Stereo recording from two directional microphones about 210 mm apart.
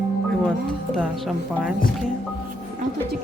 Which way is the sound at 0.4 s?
Centre (ahead or behind).